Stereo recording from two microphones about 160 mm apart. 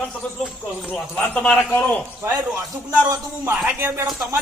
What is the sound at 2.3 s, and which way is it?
A man's voice, 20° right (ahead or behind).